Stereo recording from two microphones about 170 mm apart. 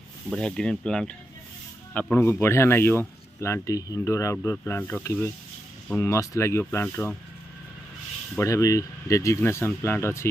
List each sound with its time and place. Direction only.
0.3 s speech: 5° left (ahead or behind)
8.4 s speech: 20° left (ahead or behind)